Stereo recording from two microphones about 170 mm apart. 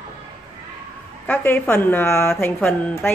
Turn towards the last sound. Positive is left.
turn(degrees=10)  # may be behind; listen again after turning